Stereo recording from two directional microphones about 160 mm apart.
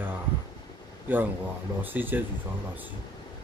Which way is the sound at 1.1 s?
10° right (ahead or behind).